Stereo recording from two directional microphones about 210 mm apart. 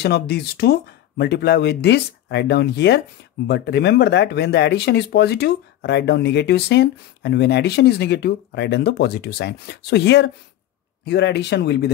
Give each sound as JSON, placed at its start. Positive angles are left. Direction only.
{"t": 0.0, "sound": "speech", "side_deg": 50}